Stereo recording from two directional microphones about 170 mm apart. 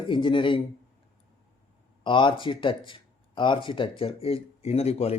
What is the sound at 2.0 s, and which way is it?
Speech, 30° left (ahead or behind).